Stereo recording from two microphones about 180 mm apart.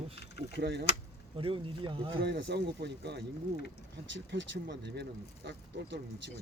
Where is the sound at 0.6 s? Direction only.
65° right (ahead or behind).